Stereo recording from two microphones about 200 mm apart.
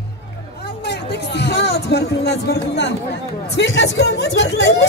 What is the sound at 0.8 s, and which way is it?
Speech, 55° left (ahead or behind).